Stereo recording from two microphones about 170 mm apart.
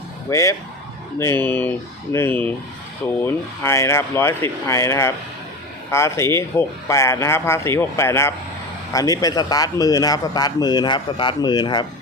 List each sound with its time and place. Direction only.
0.3 s a man's voice: 20° left (ahead or behind)